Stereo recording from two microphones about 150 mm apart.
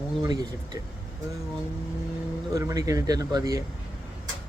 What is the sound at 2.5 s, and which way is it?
Speech, 25° right (ahead or behind).